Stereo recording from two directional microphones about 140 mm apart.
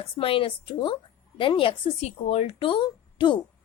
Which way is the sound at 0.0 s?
40° left (ahead or behind).